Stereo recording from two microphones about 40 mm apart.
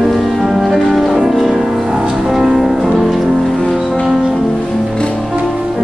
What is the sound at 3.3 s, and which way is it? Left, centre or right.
Music, centre.